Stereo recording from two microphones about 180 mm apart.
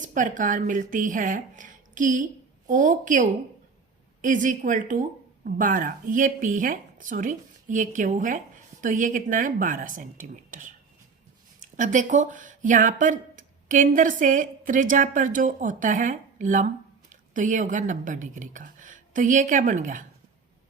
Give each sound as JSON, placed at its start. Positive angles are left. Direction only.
{"t": 0.0, "sound": "speech", "side_deg": -45}
{"t": 11.8, "sound": "speech", "side_deg": -45}